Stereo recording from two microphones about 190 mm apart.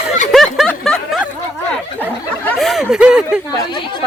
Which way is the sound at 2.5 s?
Centre (ahead or behind).